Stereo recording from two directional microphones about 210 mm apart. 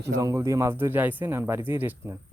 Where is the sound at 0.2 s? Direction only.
15° right (ahead or behind).